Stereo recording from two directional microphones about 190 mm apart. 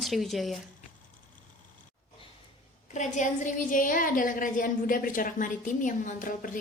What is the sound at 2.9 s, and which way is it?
A woman's voice, 40° left (ahead or behind).